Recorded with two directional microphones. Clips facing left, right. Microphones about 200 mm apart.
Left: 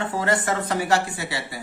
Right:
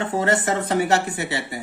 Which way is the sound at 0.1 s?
25° right (ahead or behind).